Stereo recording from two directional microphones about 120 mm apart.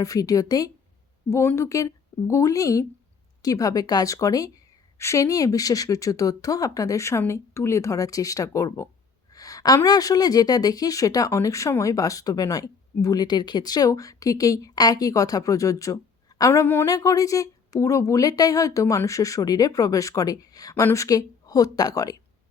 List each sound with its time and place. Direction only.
0.0 s a woman's voice: 30° left (ahead or behind)